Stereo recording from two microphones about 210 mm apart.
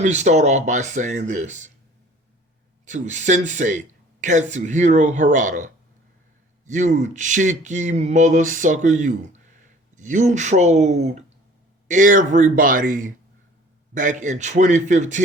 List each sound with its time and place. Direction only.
0.0 s speech: 35° right (ahead or behind)
2.8 s speech: 35° right (ahead or behind)